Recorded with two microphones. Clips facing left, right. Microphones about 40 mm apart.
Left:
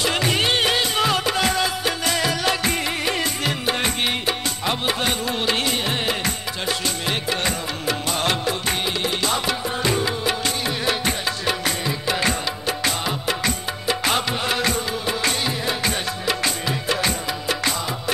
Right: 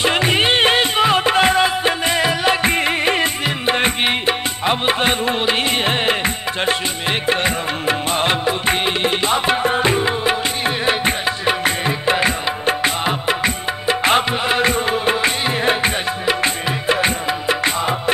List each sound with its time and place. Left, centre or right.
0.0 s music: right